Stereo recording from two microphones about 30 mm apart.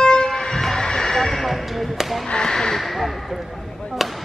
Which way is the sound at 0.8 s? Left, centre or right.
Centre.